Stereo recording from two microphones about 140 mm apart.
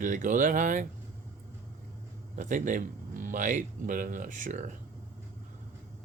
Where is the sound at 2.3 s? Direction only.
65° right (ahead or behind).